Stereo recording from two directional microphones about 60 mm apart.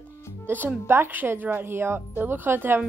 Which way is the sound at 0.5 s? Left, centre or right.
Right.